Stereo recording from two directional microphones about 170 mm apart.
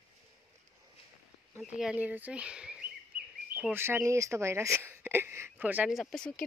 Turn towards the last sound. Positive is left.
turn(degrees=0)  # may be behind; listen again after turning